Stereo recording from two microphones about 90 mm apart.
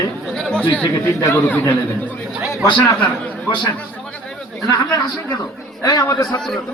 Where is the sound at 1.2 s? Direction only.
25° left (ahead or behind).